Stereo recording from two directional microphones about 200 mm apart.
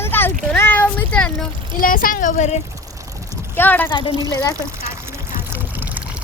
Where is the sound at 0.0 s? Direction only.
10° left (ahead or behind).